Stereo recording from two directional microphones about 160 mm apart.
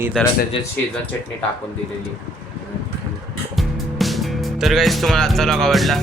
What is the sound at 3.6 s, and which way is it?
Music, centre (ahead or behind).